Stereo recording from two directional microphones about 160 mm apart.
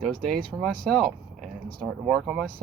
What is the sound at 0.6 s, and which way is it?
Speech, centre (ahead or behind).